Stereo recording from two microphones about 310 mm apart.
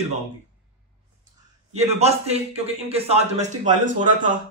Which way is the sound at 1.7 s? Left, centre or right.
Right.